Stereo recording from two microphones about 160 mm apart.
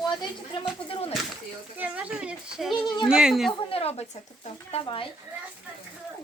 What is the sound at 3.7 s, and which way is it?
Speech, 40° left (ahead or behind).